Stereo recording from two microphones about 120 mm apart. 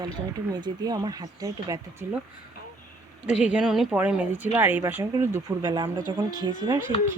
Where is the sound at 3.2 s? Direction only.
10° right (ahead or behind).